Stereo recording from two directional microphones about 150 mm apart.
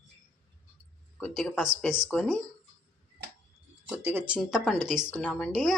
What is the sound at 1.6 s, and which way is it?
Speech, centre (ahead or behind).